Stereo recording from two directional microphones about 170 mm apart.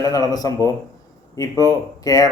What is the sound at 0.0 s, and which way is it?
A man's voice, 20° left (ahead or behind).